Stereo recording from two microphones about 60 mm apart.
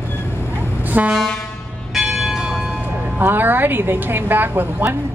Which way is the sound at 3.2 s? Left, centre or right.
Right.